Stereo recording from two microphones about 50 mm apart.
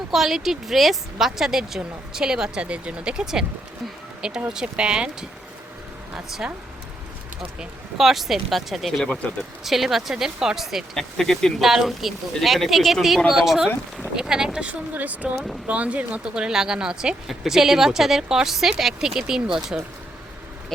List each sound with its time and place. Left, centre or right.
0.1 s a woman's voice: centre
4.5 s a woman's voice: centre
6.1 s a woman's voice: centre
7.9 s a woman's voice: centre
10.9 s speech: centre
11.6 s a woman's voice: centre
14.7 s speech: right
16.2 s a woman's voice: centre